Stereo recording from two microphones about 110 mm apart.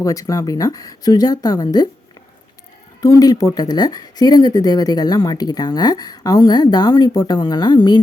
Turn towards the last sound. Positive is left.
turn(degrees=40)  # may be behind; listen again after turning